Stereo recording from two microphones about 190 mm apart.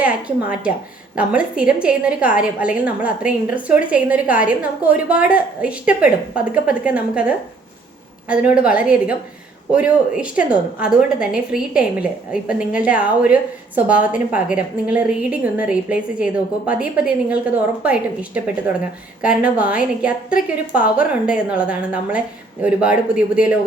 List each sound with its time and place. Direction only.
0.0 s a woman's voice: 5° right (ahead or behind)